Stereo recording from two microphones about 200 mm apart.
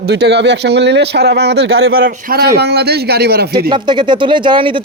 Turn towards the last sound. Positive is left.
turn(degrees=-25)  # may be behind; listen again after turning